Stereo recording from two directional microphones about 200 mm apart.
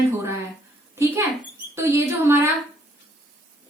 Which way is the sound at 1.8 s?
10° right (ahead or behind).